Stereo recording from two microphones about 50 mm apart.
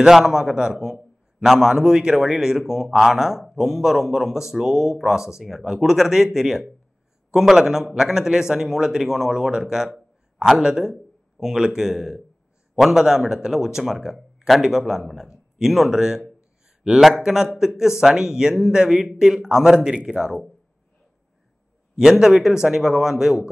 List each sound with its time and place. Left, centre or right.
0.0 s a man's voice: centre
21.9 s a man's voice: centre